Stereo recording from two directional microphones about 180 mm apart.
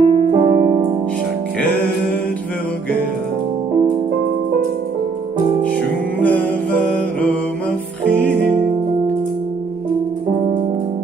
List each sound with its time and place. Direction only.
0.0 s music: 30° right (ahead or behind)
6.1 s music: 10° left (ahead or behind)